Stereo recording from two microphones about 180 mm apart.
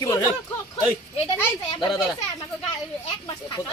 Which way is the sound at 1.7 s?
25° left (ahead or behind).